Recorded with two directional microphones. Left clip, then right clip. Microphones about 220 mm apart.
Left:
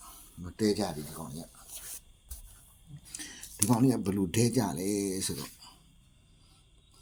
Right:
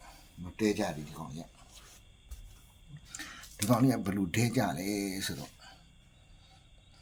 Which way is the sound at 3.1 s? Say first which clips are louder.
Even; 10° left (ahead or behind).